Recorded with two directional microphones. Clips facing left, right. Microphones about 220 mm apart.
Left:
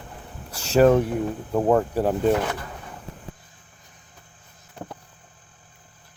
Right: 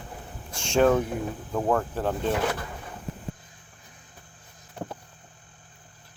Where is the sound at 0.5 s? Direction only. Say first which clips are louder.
Left 4 dB; 5° left (ahead or behind).